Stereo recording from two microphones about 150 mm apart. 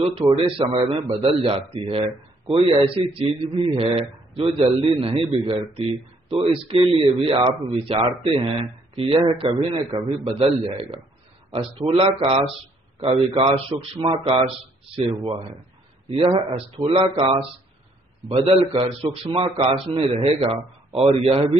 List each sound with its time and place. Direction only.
0.2 s a man's voice: 20° right (ahead or behind)
0.6 s a man's voice: 35° right (ahead or behind)
1.0 s a man's voice: 25° right (ahead or behind)
1.4 s a man's voice: 40° right (ahead or behind)